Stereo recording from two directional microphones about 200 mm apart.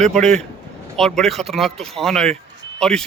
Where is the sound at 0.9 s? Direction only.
5° left (ahead or behind).